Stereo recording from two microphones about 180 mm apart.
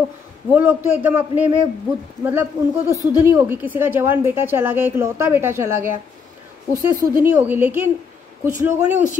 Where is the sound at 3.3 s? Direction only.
10° right (ahead or behind).